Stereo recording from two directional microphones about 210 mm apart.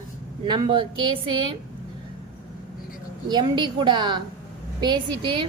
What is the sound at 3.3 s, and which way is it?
A woman's voice, 20° right (ahead or behind).